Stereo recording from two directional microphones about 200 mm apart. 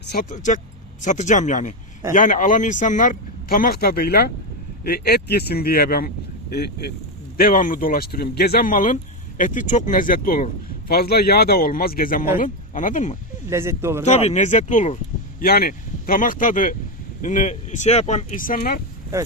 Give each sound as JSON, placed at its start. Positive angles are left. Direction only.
{"t": 0.0, "sound": "speech", "side_deg": 55}
{"t": 0.3, "sound": "a man's voice", "side_deg": 40}
{"t": 13.5, "sound": "speech", "side_deg": -15}
{"t": 14.0, "sound": "speech", "side_deg": 35}
{"t": 15.4, "sound": "speech", "side_deg": 50}